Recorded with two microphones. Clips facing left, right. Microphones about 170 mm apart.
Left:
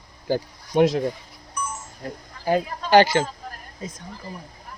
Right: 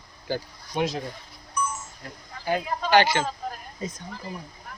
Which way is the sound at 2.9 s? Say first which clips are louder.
Left 4 dB; 40° left (ahead or behind).